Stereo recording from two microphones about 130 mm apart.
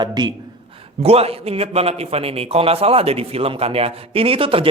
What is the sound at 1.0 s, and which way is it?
A man's voice, 50° right (ahead or behind).